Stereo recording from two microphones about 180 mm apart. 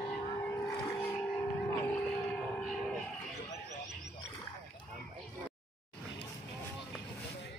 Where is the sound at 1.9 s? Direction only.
10° left (ahead or behind).